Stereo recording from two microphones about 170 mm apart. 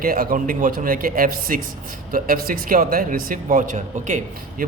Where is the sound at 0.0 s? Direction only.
60° right (ahead or behind).